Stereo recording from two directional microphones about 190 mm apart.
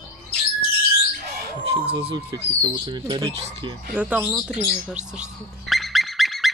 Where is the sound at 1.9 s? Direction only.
30° right (ahead or behind).